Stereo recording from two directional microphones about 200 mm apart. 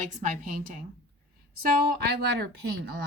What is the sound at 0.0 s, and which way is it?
Speech, 40° right (ahead or behind).